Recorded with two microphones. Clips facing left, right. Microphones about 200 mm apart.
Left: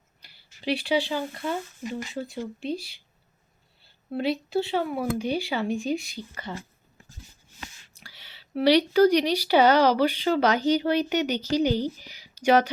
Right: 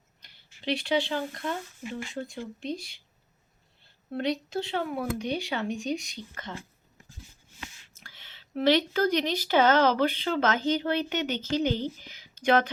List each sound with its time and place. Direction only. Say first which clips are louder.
0.2 s a sound: left 3 dB; 5° left (ahead or behind)
0.6 s speech: left 2 dB; 5° left (ahead or behind)
1.8 s speech: left 3 dB; 40° left (ahead or behind)
2.1 s speech: left 2 dB; 5° left (ahead or behind)
2.6 s speech: left 3 dB; 35° left (ahead or behind)
4.1 s speech: left 3 dB; 5° left (ahead or behind)
7.9 s a woman's voice: left 2 dB; 15° left (ahead or behind)